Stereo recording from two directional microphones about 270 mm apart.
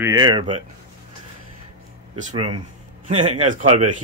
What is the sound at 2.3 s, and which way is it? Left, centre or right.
Speech, centre.